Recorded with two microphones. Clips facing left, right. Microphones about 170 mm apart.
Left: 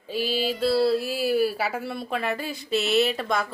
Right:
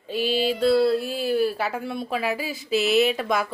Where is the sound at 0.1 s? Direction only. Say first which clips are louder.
Right 3 dB; 5° left (ahead or behind).